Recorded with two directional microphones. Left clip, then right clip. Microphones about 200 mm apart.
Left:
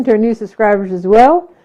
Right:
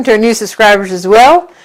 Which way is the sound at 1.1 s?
20° right (ahead or behind).